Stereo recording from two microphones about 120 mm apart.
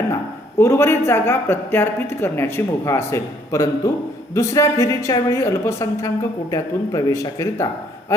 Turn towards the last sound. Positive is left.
turn(degrees=25)  # may be behind; listen again after turning